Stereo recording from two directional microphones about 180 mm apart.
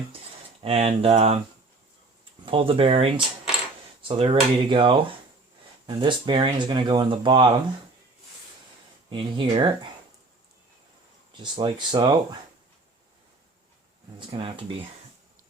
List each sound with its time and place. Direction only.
0.6 s speech: 35° right (ahead or behind)
2.5 s speech: 30° right (ahead or behind)
9.0 s speech: 25° right (ahead or behind)
11.3 s speech: 25° right (ahead or behind)
14.2 s speech: 30° right (ahead or behind)